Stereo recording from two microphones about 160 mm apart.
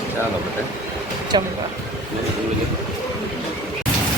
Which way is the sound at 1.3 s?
25° right (ahead or behind).